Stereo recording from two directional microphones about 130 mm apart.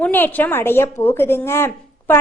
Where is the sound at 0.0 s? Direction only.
15° left (ahead or behind).